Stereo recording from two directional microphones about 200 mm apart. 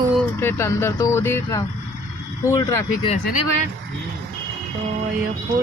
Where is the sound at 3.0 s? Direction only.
30° left (ahead or behind).